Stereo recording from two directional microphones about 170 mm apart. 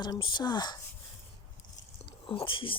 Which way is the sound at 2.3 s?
30° left (ahead or behind).